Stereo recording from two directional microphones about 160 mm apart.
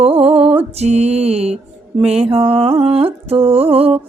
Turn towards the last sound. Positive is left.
turn(degrees=-35)  # may be behind; listen again after turning